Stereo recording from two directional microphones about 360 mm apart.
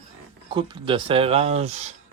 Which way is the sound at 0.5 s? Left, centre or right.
Centre.